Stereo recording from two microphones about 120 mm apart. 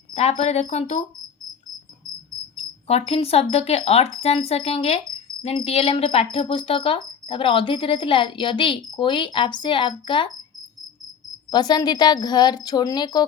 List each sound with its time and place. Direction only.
0.1 s speech: 60° left (ahead or behind)
2.6 s speech: 55° left (ahead or behind)
11.5 s speech: 35° left (ahead or behind)